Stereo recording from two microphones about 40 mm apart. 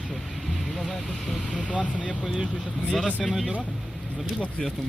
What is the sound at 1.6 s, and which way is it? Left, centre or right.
Speech, left.